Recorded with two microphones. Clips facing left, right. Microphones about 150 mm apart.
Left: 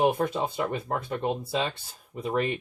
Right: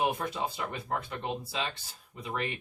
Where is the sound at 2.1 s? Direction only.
45° left (ahead or behind).